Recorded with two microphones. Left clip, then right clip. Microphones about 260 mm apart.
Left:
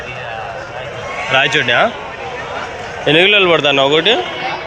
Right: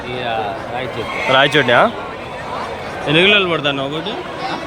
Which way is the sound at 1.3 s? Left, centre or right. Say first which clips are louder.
Right 1 dB; centre.